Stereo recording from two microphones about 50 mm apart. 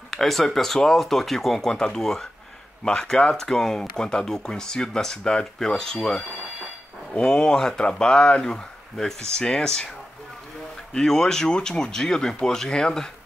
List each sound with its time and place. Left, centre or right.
0.1 s speech: centre
7.2 s speech: centre
10.9 s speech: centre